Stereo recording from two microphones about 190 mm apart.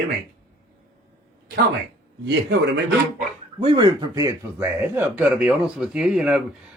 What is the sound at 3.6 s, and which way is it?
A man's voice, 20° right (ahead or behind).